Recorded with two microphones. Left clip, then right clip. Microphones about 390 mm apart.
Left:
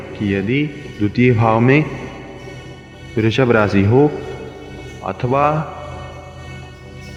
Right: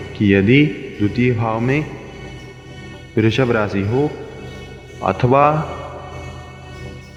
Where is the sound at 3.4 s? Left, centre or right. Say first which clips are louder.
Left 4 dB; left.